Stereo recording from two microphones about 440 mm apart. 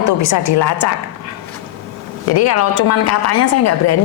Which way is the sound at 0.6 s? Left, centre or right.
Left.